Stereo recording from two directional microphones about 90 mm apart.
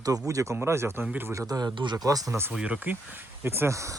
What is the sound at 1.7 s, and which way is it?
Speech, 60° right (ahead or behind).